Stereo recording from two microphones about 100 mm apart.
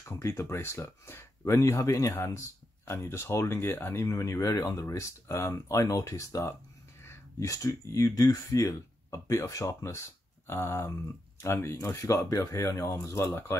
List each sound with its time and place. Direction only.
0.1 s speech: 25° left (ahead or behind)